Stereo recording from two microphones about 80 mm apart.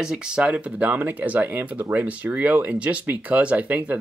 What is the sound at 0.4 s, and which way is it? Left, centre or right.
Speech, centre.